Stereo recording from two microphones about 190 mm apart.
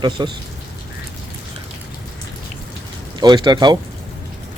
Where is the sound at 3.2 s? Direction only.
20° right (ahead or behind).